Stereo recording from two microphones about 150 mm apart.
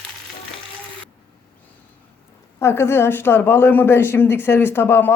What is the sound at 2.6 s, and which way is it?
Speech, 15° left (ahead or behind).